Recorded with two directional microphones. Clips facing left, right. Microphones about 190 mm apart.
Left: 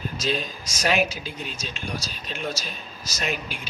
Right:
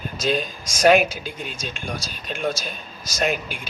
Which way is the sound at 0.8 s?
50° right (ahead or behind).